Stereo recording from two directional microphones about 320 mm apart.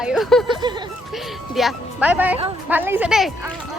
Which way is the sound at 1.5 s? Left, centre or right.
Centre.